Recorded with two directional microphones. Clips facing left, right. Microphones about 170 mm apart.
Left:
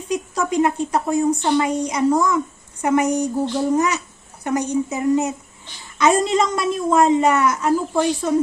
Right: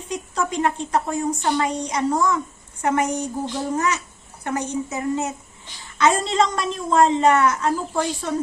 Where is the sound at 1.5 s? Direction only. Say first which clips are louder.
Left 4 dB; 10° left (ahead or behind).